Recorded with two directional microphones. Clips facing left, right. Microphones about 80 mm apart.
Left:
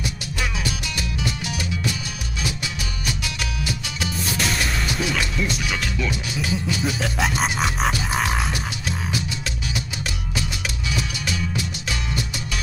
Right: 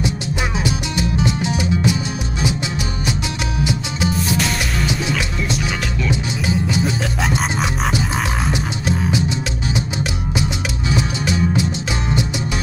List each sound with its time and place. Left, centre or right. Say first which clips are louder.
0.0 s music: right 6 dB; right
5.1 s music: right 2 dB; centre
6.0 s music: right 5 dB; right
7.0 s music: right 2 dB; centre
8.5 s music: right 7 dB; right
10.9 s music: right 8 dB; right